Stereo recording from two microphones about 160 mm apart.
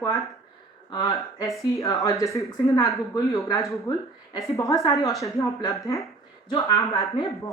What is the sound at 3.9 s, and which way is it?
Speech, 25° left (ahead or behind).